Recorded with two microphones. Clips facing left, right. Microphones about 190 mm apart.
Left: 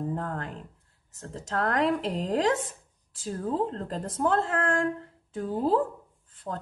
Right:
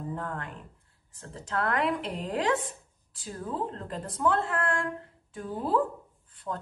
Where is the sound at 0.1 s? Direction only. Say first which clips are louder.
Left 3 dB; 35° left (ahead or behind).